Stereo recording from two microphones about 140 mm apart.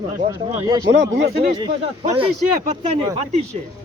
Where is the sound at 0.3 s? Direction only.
30° right (ahead or behind).